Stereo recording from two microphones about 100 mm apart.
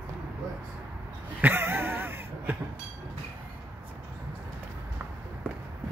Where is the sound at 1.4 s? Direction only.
20° right (ahead or behind).